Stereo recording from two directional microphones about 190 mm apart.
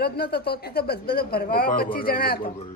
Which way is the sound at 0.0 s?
55° left (ahead or behind).